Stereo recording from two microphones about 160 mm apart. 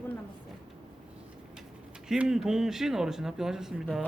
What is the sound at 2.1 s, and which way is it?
Speech, 5° right (ahead or behind).